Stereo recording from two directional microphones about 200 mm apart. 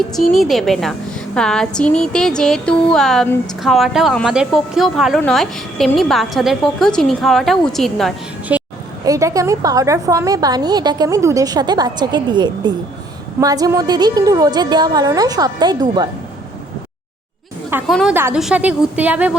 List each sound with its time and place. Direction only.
0.2 s speech: centre (ahead or behind)
9.0 s a woman's voice: 15° right (ahead or behind)
17.8 s speech: centre (ahead or behind)
18.1 s a woman's voice: 10° right (ahead or behind)